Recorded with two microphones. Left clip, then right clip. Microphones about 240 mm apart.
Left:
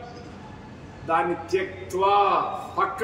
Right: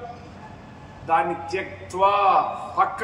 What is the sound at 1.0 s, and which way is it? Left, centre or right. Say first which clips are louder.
A man's voice: right 2 dB; centre.